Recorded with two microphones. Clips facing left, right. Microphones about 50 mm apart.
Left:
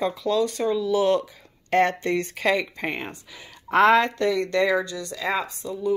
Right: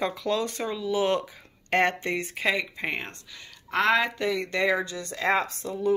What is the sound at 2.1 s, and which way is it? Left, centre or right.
Speech, right.